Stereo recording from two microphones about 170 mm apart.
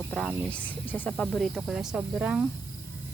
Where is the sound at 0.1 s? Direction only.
5° left (ahead or behind).